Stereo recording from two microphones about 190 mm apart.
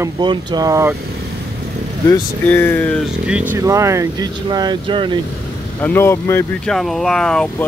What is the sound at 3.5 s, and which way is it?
Speech, 15° right (ahead or behind).